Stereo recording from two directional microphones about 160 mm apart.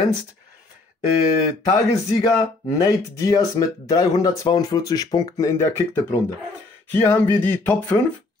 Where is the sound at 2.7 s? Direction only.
25° left (ahead or behind).